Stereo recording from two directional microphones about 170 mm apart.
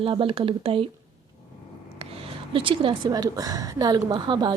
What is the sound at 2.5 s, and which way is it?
A woman's voice, 30° right (ahead or behind).